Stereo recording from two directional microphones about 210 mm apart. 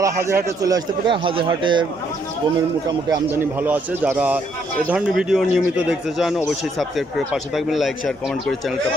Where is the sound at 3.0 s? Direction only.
15° right (ahead or behind).